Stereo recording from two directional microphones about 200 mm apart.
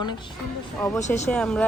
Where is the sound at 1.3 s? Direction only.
5° left (ahead or behind).